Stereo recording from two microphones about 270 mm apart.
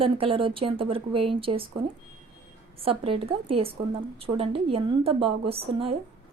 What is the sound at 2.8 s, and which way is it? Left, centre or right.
Speech, centre.